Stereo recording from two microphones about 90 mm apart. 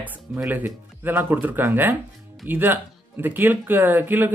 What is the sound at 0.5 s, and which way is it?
Speech, 20° right (ahead or behind).